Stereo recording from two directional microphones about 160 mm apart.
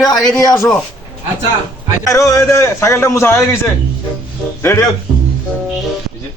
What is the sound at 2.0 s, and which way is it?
A man's voice, 20° left (ahead or behind).